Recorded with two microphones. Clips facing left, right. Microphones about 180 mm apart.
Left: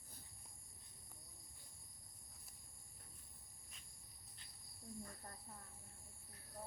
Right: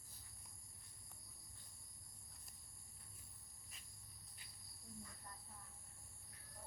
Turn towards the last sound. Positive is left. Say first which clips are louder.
# left 3 dB
turn(degrees=55)  # may be behind; listen again after turning